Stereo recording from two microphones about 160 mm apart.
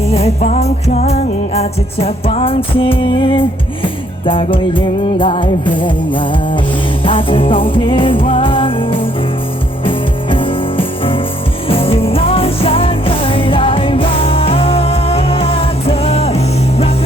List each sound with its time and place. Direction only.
0.1 s music: 40° left (ahead or behind)